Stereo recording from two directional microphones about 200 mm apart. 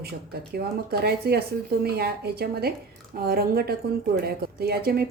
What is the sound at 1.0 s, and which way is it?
Speech, 50° right (ahead or behind).